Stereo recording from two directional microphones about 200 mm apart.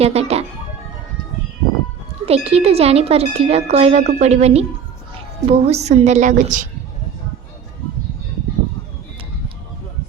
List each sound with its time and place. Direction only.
0.0 s music: 30° right (ahead or behind)
2.2 s speech: 30° right (ahead or behind)